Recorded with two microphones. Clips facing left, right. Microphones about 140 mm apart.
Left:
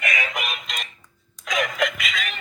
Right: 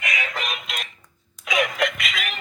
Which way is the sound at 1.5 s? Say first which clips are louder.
Right 1 dB; centre (ahead or behind).